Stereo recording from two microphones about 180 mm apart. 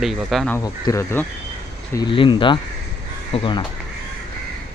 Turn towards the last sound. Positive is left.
turn(degrees=30)  # may be behind; listen again after turning